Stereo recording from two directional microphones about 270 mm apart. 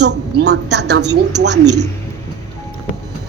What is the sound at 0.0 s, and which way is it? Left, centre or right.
A woman's voice, right.